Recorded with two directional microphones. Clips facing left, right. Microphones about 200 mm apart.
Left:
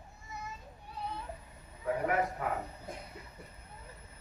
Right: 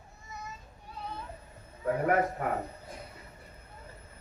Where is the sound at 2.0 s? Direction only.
45° right (ahead or behind).